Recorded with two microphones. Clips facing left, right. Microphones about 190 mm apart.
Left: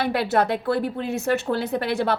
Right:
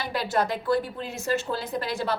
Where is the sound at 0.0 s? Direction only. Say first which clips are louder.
Left 5 dB; 60° left (ahead or behind).